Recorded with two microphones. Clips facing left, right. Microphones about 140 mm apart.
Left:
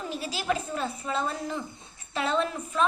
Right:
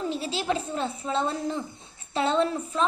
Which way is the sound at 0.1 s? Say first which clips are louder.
Right 2 dB; 25° right (ahead or behind).